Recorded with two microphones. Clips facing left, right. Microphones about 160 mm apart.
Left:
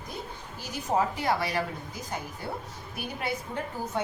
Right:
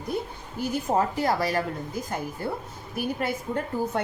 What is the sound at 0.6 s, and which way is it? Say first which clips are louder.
A woman's voice: right 3 dB; 50° right (ahead or behind).